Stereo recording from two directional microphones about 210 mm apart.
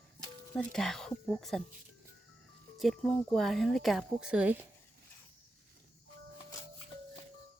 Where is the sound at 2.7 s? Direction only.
Centre (ahead or behind).